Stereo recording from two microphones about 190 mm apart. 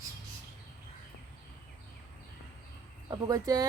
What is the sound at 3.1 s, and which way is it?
Speech, 20° right (ahead or behind).